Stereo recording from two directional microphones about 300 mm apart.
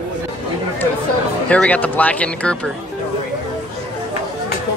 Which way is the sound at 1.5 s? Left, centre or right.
Centre.